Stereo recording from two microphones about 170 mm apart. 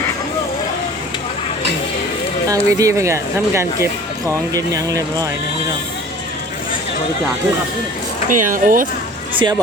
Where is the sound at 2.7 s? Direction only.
15° right (ahead or behind).